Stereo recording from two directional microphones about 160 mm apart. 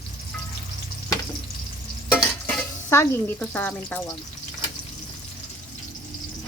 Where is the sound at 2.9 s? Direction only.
15° left (ahead or behind).